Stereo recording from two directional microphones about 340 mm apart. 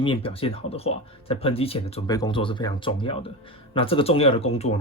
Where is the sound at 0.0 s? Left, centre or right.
Centre.